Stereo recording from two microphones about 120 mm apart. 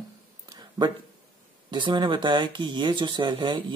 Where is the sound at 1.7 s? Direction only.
40° right (ahead or behind).